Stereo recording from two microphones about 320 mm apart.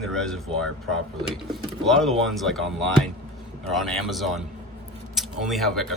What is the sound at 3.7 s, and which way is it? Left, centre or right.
Speech, centre.